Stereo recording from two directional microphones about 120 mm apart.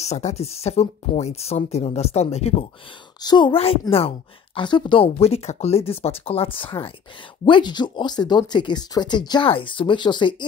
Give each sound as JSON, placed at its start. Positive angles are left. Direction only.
{"t": 0.0, "sound": "speech", "side_deg": 65}
{"t": 3.2, "sound": "speech", "side_deg": 35}
{"t": 3.5, "sound": "speech", "side_deg": 55}
{"t": 4.6, "sound": "speech", "side_deg": 40}